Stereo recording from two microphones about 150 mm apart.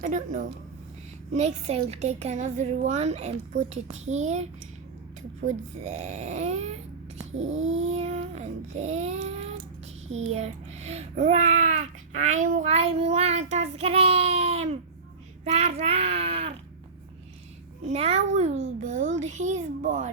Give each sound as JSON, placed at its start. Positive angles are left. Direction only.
{"t": 0.0, "sound": "speech", "side_deg": -60}
{"t": 1.3, "sound": "a child's voice", "side_deg": -45}
{"t": 5.5, "sound": "a child's voice", "side_deg": -50}
{"t": 17.8, "sound": "a child's voice", "side_deg": -45}